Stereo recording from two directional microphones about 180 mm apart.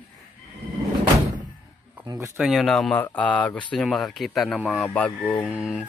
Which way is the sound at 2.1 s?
5° right (ahead or behind).